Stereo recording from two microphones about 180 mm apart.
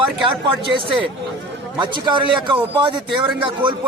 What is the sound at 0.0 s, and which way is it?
A man's voice, 30° right (ahead or behind).